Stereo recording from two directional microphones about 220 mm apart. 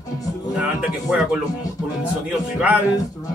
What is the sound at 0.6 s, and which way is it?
Speech, 5° right (ahead or behind).